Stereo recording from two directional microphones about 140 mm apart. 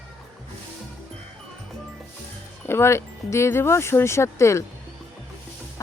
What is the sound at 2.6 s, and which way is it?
Speech, 20° left (ahead or behind).